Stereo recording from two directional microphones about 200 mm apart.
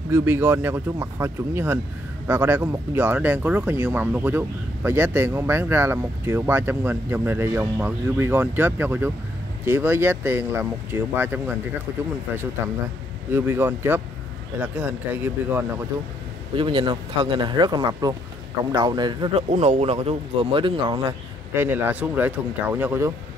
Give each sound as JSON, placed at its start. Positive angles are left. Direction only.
{"t": 0.1, "sound": "speech", "side_deg": -10}
{"t": 13.3, "sound": "speech", "side_deg": -10}
{"t": 16.5, "sound": "speech", "side_deg": -25}
{"t": 19.5, "sound": "speech", "side_deg": -35}
{"t": 21.5, "sound": "speech", "side_deg": -10}